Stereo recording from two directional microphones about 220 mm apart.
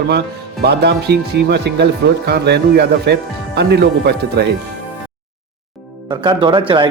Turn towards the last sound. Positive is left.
turn(degrees=-25)  # may be behind; listen again after turning